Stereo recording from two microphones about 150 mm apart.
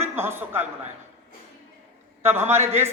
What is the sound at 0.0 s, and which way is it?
Speech, 15° right (ahead or behind).